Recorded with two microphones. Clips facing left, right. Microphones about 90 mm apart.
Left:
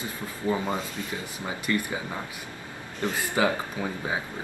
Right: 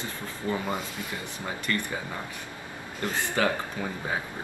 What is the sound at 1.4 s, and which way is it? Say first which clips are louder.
Speech: left 2 dB; 15° left (ahead or behind).